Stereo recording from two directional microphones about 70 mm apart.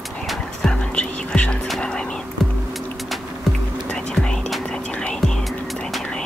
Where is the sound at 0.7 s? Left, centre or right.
Centre.